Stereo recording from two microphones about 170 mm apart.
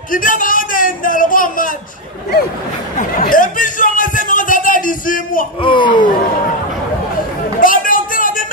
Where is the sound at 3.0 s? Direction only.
50° left (ahead or behind).